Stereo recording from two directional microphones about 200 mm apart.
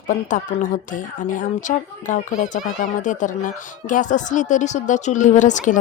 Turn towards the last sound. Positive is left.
turn(degrees=40)  # may be behind; listen again after turning